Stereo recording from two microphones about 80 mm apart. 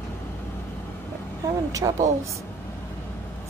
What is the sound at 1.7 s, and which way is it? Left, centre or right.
Speech, right.